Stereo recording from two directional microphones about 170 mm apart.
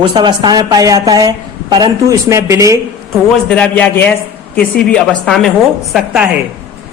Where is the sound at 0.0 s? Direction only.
25° right (ahead or behind).